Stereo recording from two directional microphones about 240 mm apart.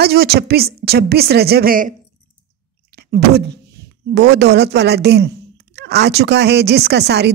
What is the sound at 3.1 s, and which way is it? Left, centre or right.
A woman's voice, right.